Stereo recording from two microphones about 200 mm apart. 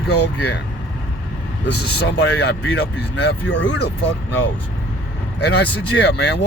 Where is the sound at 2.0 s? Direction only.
55° left (ahead or behind).